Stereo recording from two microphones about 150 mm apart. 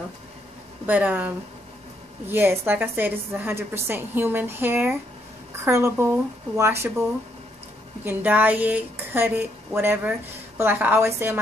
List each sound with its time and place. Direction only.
0.8 s a woman's voice: 10° right (ahead or behind)
8.0 s a woman's voice: 10° right (ahead or behind)